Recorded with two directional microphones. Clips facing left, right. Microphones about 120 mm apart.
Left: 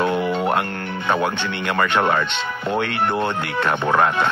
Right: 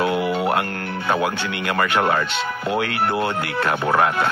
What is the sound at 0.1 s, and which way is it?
Music, 10° right (ahead or behind).